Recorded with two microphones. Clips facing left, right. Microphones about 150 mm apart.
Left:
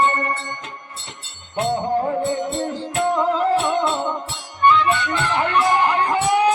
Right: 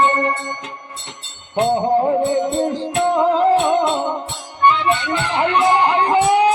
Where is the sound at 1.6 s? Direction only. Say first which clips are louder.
Right 5 dB; 20° right (ahead or behind).